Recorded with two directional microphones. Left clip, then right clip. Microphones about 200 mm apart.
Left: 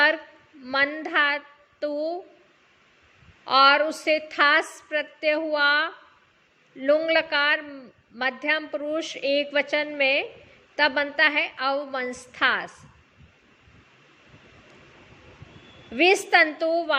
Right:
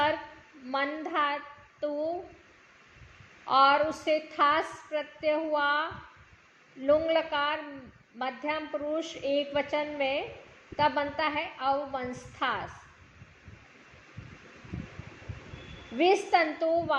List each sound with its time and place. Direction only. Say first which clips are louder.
0.7 s a woman's voice: left 7 dB; 35° left (ahead or behind)
3.4 s a woman's voice: left 5 dB; 35° left (ahead or behind)
16.0 s a woman's voice: left 6 dB; 30° left (ahead or behind)